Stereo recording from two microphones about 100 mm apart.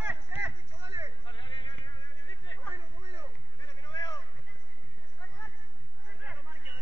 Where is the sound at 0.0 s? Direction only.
15° right (ahead or behind).